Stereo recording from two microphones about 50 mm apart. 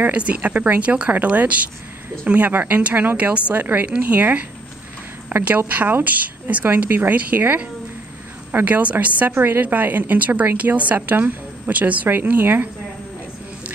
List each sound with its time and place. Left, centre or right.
0.0 s a woman's voice: right
9.3 s a woman's voice: right